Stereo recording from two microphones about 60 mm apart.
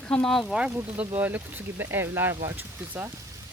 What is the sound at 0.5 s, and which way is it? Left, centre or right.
Speech, centre.